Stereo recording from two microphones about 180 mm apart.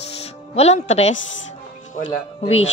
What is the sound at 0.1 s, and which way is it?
Music, 35° left (ahead or behind).